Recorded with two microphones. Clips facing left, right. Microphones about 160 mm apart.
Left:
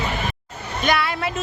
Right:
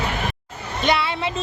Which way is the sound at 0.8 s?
25° right (ahead or behind).